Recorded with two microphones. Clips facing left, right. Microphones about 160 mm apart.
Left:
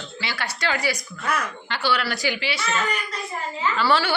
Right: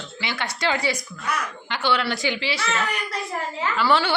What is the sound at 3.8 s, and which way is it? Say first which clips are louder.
Speech: right 1 dB; 15° right (ahead or behind).